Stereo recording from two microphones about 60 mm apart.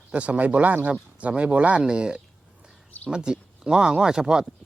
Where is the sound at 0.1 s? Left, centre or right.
Right.